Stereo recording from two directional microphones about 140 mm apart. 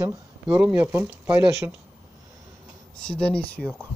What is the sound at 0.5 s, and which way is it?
Speech, 10° right (ahead or behind).